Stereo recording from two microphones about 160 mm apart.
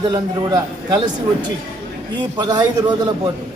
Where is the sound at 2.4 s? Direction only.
25° right (ahead or behind).